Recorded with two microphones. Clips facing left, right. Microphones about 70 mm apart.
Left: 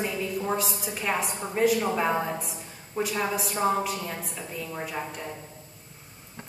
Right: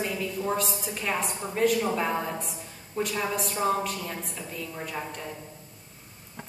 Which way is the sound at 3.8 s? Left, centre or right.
Centre.